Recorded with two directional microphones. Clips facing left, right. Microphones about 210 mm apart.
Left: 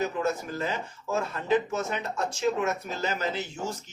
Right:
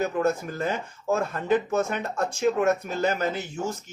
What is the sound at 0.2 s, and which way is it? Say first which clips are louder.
Speech: right 4 dB; 50° right (ahead or behind).